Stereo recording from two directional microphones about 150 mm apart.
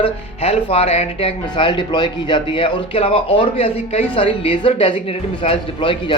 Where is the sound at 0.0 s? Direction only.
40° left (ahead or behind).